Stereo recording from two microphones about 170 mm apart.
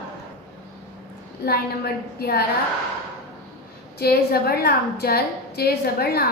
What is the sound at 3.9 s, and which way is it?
A woman's voice, 70° left (ahead or behind).